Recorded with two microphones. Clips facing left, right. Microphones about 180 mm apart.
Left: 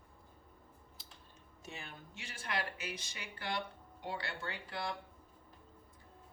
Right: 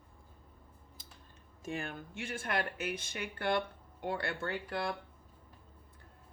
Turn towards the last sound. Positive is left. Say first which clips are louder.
# right 5 dB
turn(degrees=-50)  # may be behind; listen again after turning